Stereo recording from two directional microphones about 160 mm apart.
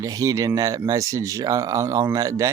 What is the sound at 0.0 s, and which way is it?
Speech, 20° right (ahead or behind).